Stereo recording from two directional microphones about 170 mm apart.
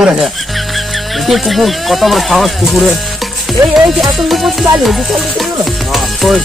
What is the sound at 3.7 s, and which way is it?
Music, centre (ahead or behind).